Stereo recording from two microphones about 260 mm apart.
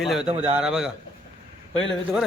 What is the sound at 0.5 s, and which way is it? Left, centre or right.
Speech, centre.